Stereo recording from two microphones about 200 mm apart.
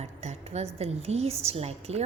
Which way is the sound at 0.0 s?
35° right (ahead or behind).